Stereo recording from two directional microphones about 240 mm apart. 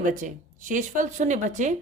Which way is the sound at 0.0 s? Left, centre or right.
Right.